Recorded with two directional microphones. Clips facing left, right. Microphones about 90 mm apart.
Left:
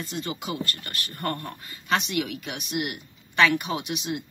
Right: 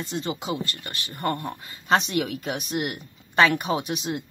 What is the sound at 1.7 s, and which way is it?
Speech, 35° right (ahead or behind).